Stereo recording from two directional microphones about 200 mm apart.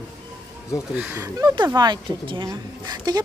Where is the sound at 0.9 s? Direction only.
10° right (ahead or behind).